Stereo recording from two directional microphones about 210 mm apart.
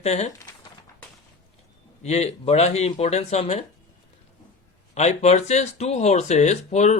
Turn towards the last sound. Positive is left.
turn(degrees=35)  # may be behind; listen again after turning